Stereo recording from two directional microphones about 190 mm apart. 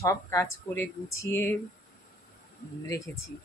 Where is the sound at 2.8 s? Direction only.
15° left (ahead or behind).